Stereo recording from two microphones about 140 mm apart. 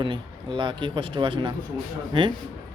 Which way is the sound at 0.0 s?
35° right (ahead or behind).